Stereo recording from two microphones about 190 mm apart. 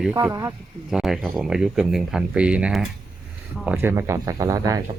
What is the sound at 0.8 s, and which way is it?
Speech, centre (ahead or behind).